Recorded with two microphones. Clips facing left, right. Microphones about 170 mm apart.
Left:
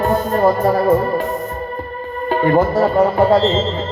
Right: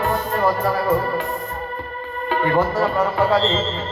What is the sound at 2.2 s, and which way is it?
A man's voice, 35° left (ahead or behind).